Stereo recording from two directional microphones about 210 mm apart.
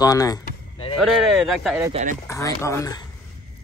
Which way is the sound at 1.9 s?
35° right (ahead or behind).